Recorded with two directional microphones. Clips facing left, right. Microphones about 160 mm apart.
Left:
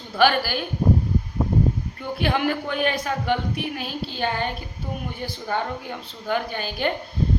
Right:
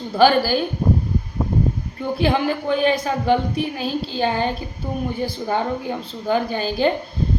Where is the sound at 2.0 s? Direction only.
30° right (ahead or behind).